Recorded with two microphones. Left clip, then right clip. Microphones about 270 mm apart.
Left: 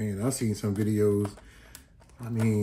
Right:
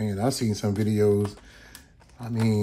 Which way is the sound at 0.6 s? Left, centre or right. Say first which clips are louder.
Right 3 dB; right.